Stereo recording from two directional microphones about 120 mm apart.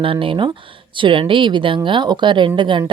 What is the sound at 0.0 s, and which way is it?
Speech, 45° right (ahead or behind).